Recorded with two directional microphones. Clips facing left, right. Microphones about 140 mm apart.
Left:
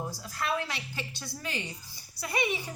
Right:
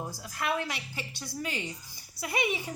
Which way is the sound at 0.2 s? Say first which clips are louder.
Right 2 dB; 20° right (ahead or behind).